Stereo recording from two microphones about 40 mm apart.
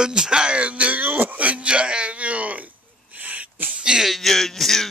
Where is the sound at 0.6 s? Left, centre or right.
Right.